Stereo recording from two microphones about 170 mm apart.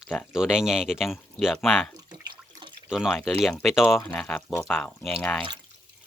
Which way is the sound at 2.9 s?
5° right (ahead or behind).